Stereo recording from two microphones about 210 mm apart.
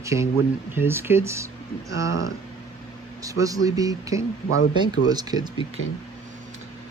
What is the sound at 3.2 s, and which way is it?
Speech, 15° right (ahead or behind).